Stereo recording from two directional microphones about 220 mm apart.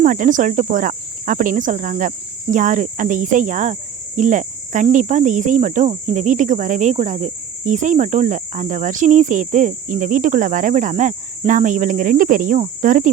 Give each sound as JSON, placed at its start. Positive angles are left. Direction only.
{"t": 0.0, "sound": "cricket", "side_deg": -35}